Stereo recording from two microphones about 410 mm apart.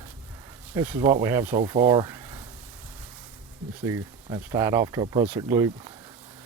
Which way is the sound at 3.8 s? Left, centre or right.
Centre.